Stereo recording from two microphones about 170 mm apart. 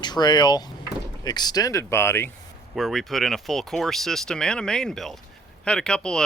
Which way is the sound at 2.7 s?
Centre (ahead or behind).